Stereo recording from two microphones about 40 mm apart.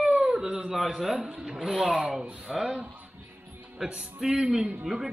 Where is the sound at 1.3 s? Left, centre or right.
Right.